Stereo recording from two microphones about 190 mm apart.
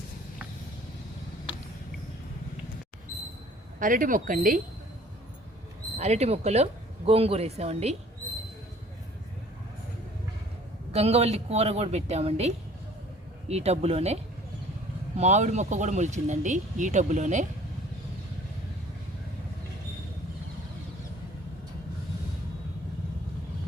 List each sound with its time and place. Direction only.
3.8 s speech: 45° right (ahead or behind)
6.0 s speech: 35° right (ahead or behind)
10.9 s speech: 35° right (ahead or behind)